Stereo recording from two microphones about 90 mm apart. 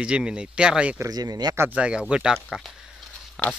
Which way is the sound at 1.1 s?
45° right (ahead or behind).